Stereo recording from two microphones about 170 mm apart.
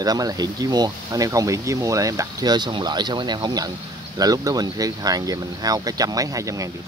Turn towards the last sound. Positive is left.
turn(degrees=-20)  # may be behind; listen again after turning